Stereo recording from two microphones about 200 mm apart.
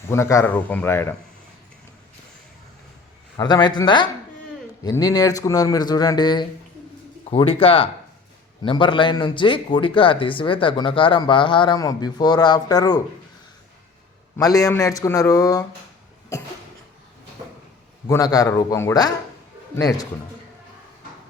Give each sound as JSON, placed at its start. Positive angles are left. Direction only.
{"t": 0.1, "sound": "speech", "side_deg": 15}
{"t": 3.3, "sound": "speech", "side_deg": 20}
{"t": 14.3, "sound": "speech", "side_deg": 15}
{"t": 18.1, "sound": "speech", "side_deg": 20}